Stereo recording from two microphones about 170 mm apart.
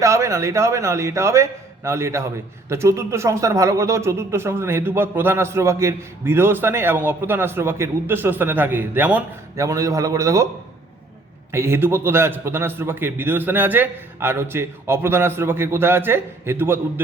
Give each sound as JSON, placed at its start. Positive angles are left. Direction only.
{"t": 0.0, "sound": "speech", "side_deg": -15}
{"t": 11.5, "sound": "speech", "side_deg": -15}